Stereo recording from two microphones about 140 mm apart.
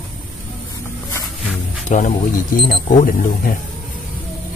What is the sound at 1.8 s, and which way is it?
Speech, 60° left (ahead or behind).